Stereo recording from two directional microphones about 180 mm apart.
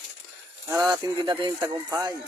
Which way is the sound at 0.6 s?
20° right (ahead or behind).